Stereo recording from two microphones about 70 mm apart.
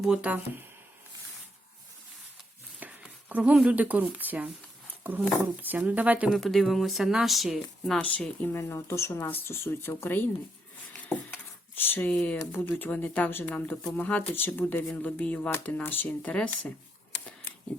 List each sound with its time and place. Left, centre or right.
0.0 s speech: centre
2.8 s a sound: right
4.1 s speech: right
6.3 s speech: centre
7.9 s speech: centre
8.5 s speech: left
10.9 s dishes: left
11.8 s speech: left
12.5 s speech: left